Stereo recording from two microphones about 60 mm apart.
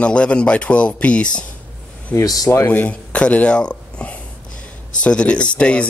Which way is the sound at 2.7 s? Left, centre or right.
Left.